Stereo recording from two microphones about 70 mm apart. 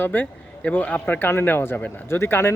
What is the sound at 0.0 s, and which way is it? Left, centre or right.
Speech, left.